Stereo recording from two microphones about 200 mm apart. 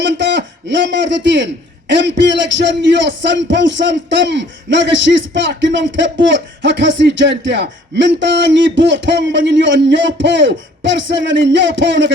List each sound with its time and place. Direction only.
0.0 s a man's voice: 60° right (ahead or behind)